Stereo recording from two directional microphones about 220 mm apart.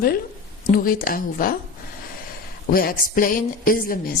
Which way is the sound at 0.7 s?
40° left (ahead or behind).